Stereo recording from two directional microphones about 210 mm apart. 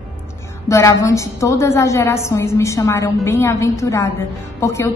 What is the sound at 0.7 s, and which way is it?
A woman's voice, 15° left (ahead or behind).